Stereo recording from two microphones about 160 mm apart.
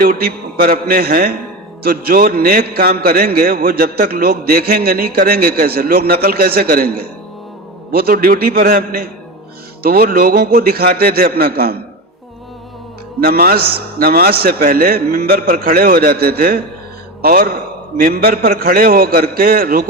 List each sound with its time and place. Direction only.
0.0 s a man's voice: 65° right (ahead or behind)
13.1 s a man's voice: 70° right (ahead or behind)